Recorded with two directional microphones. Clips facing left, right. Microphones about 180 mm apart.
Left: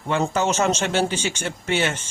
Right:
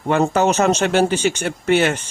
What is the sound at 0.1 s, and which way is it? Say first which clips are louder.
A man's voice: right 5 dB; 60° right (ahead or behind).